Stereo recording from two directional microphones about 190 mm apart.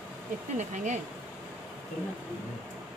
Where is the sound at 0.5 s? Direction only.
40° right (ahead or behind).